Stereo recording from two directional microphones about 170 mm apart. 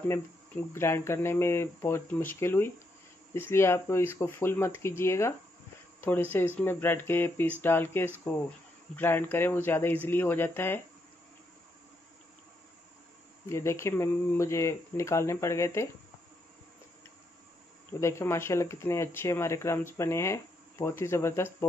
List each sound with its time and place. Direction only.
0.7 s speech: 15° left (ahead or behind)
6.3 s speech: 10° left (ahead or behind)
13.5 s speech: 15° left (ahead or behind)
18.0 s speech: 15° left (ahead or behind)